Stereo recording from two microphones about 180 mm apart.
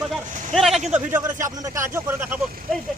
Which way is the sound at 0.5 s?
Centre (ahead or behind).